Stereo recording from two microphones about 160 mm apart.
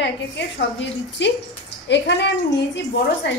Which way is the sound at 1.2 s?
90° left.